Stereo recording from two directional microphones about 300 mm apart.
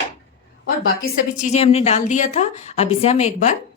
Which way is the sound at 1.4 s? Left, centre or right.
Left.